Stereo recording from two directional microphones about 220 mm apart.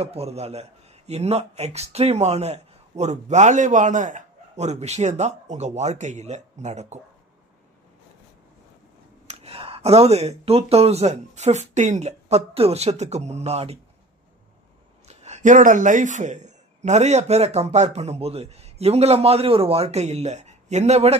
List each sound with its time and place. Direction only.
0.0 s speech: 30° right (ahead or behind)
9.3 s a man's voice: 25° right (ahead or behind)
15.0 s a man's voice: 30° right (ahead or behind)